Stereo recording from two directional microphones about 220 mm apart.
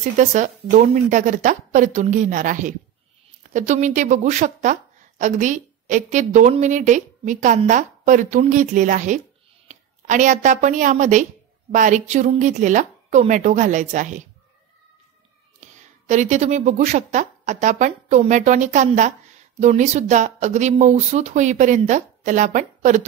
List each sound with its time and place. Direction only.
0.0 s a woman's voice: 35° right (ahead or behind)
16.1 s a woman's voice: 35° right (ahead or behind)